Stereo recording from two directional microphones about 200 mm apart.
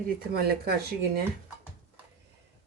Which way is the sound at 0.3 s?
50° right (ahead or behind).